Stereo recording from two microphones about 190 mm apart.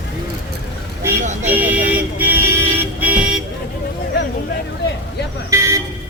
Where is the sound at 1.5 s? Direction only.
10° right (ahead or behind).